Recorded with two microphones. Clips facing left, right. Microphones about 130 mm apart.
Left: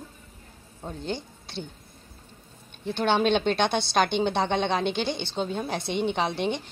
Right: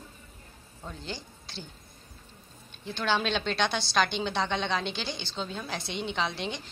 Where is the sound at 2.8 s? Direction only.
60° left (ahead or behind).